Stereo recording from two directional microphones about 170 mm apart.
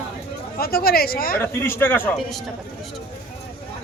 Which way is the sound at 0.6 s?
65° left (ahead or behind).